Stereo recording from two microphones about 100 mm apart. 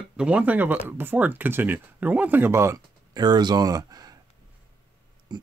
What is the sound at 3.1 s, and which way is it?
Speech, 45° right (ahead or behind).